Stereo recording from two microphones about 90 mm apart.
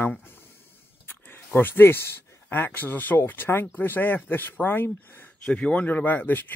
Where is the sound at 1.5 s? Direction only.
25° left (ahead or behind).